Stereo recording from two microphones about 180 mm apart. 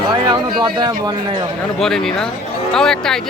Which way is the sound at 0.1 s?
20° right (ahead or behind).